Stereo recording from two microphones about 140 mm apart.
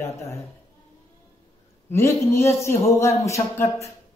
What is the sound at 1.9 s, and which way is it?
A woman's voice, 20° left (ahead or behind).